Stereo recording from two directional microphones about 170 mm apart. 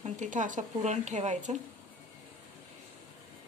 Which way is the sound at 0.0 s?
45° right (ahead or behind).